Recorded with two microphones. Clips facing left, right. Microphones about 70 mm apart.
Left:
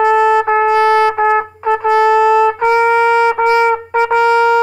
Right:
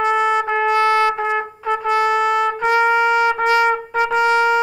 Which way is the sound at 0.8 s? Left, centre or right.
Left.